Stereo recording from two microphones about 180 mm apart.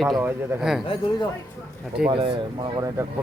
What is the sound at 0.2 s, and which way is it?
Speech, 5° right (ahead or behind).